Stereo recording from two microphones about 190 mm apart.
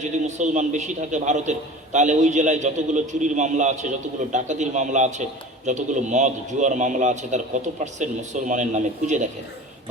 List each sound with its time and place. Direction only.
0.0 s a man's voice: 40° right (ahead or behind)